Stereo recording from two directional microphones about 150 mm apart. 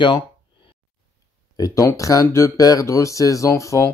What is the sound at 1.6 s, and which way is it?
Speech, 20° left (ahead or behind).